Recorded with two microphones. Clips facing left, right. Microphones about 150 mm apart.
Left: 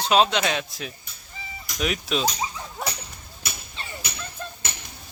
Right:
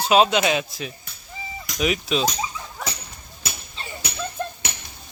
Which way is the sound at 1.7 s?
Centre (ahead or behind).